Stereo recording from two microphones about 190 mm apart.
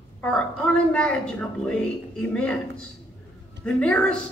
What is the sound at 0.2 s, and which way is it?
A woman's voice, 5° left (ahead or behind).